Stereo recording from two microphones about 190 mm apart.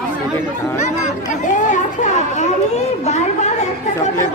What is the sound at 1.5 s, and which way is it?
Children playing, 40° left (ahead or behind).